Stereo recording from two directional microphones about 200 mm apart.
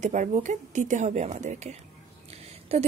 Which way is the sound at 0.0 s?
40° right (ahead or behind).